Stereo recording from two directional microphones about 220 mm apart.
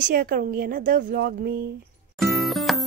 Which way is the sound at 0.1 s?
40° right (ahead or behind).